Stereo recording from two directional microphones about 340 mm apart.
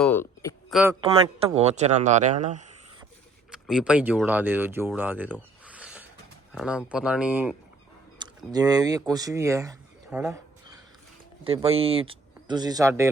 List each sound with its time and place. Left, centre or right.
0.0 s a sound: centre
1.1 s speech: centre
3.5 s speech: centre
11.4 s speech: centre